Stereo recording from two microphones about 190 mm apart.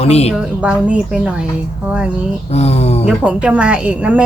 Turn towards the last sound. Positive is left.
turn(degrees=-5)  # may be behind; listen again after turning